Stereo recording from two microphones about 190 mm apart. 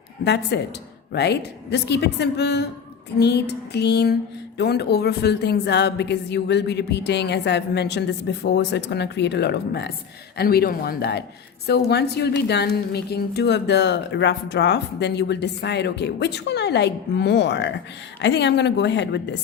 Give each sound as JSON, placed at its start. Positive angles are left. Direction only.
{"t": 0.3, "sound": "a woman's voice", "side_deg": 60}